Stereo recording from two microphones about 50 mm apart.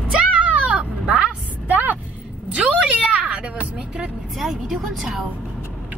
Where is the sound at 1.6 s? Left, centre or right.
Right.